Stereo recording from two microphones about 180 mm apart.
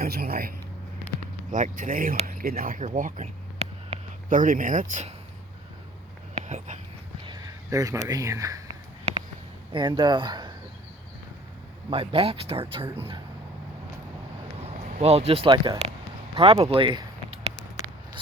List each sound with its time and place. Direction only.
0.0 s speech: 60° right (ahead or behind)
1.5 s speech: 45° right (ahead or behind)
4.3 s speech: 50° right (ahead or behind)
6.4 s whispering: 40° right (ahead or behind)
7.3 s speech: 20° right (ahead or behind)
9.7 s speech: 25° right (ahead or behind)
11.9 s speech: 30° right (ahead or behind)
14.9 s speech: 35° right (ahead or behind)
15.4 s speech: 25° right (ahead or behind)